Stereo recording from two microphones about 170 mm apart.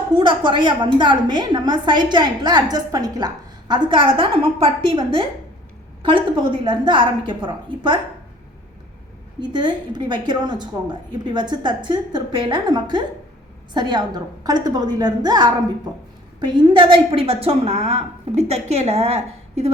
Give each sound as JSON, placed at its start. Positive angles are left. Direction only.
{"t": 0.1, "sound": "a woman's voice", "side_deg": -30}
{"t": 9.4, "sound": "a woman's voice", "side_deg": -25}